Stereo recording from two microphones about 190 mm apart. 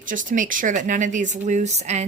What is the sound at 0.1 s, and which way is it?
A woman's voice, 45° right (ahead or behind).